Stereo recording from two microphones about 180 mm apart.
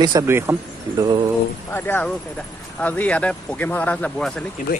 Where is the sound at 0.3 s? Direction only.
15° right (ahead or behind).